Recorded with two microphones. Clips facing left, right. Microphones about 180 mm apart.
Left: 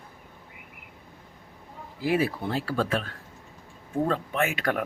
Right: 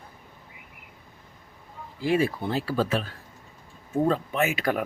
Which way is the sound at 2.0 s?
5° left (ahead or behind).